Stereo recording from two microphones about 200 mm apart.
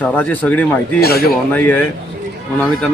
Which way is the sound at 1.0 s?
50° left (ahead or behind).